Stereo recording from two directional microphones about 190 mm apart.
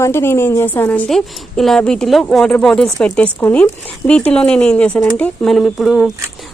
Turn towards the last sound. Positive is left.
turn(degrees=0)  # may be behind; listen again after turning